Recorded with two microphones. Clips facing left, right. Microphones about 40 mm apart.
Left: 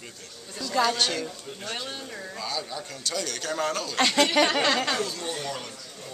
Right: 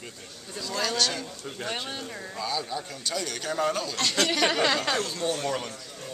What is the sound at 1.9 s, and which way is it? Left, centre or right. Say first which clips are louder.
A man's voice: right 1 dB; centre.